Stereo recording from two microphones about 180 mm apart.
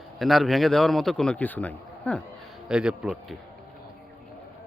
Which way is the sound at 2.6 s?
5° right (ahead or behind).